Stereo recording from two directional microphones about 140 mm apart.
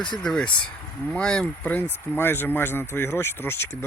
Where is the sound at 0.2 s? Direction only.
5° left (ahead or behind).